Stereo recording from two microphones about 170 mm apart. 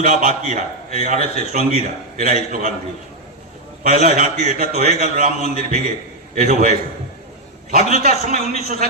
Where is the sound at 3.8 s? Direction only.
50° right (ahead or behind).